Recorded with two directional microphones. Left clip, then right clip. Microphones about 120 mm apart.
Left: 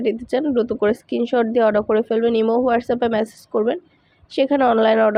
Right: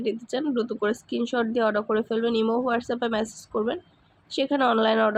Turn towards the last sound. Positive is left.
turn(degrees=35)  # may be behind; listen again after turning